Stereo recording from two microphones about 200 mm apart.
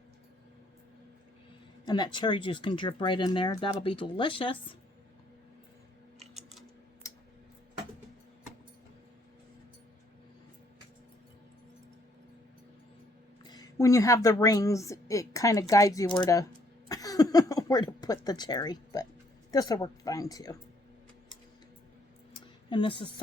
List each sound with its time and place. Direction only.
1.8 s speech: 20° left (ahead or behind)
13.4 s a woman's voice: 20° left (ahead or behind)
22.7 s speech: 25° left (ahead or behind)